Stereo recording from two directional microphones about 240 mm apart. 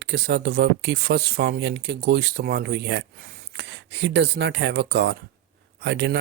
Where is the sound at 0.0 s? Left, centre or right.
Right.